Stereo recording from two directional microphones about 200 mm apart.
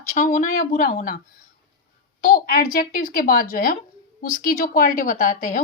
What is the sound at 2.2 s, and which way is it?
A woman's voice, 40° left (ahead or behind).